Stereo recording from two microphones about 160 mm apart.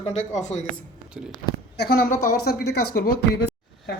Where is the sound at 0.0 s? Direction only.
45° left (ahead or behind).